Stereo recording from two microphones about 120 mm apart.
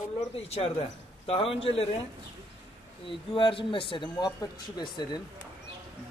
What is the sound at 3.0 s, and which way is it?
Speech, 45° left (ahead or behind).